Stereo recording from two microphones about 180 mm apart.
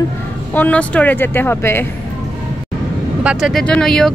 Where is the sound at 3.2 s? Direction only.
5° right (ahead or behind).